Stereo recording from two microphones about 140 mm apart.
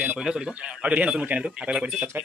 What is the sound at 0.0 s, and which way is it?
A man's voice, 10° right (ahead or behind).